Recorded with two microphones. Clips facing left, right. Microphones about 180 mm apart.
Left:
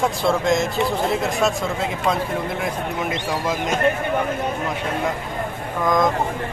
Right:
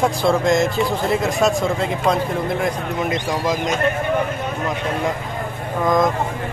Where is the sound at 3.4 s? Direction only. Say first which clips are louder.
Right 3 dB; 5° left (ahead or behind).